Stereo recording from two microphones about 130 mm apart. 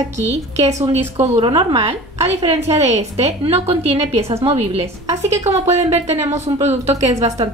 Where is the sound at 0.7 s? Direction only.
55° right (ahead or behind).